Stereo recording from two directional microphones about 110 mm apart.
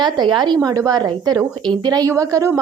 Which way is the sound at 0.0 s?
45° right (ahead or behind).